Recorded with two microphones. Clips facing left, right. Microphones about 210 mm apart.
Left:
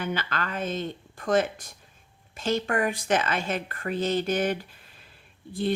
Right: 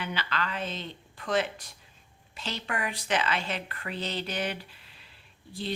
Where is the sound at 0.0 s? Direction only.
45° left (ahead or behind).